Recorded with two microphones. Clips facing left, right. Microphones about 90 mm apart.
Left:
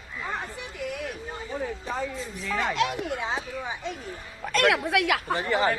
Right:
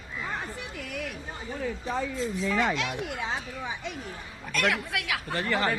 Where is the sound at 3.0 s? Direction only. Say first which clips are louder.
Left 3 dB; 35° left (ahead or behind).